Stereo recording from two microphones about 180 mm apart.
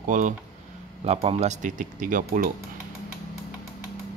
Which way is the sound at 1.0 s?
35° right (ahead or behind).